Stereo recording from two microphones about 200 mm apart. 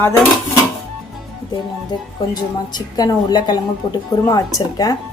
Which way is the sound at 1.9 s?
20° left (ahead or behind).